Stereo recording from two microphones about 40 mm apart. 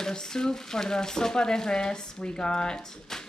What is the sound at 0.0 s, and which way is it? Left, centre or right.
Speech, centre.